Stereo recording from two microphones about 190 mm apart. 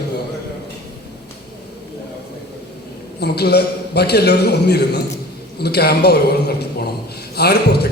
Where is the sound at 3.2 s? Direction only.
60° left (ahead or behind).